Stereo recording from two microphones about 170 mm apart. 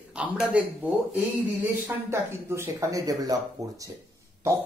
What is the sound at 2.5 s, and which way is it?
Speech, 15° right (ahead or behind).